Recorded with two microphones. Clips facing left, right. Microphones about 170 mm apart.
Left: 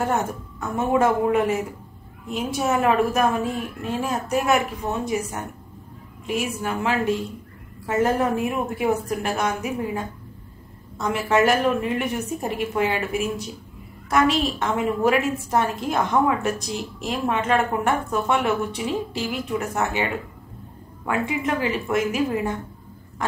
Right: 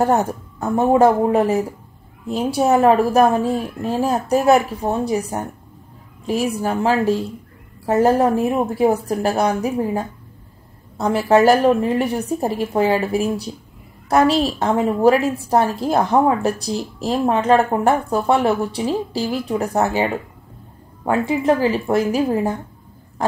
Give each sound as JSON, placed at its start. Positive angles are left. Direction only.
{"t": 0.0, "sound": "a woman's voice", "side_deg": -35}